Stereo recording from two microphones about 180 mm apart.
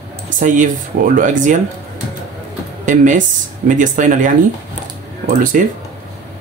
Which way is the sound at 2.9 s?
45° right (ahead or behind).